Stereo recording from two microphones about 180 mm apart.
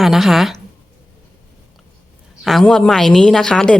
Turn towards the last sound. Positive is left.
turn(degrees=5)  # may be behind; listen again after turning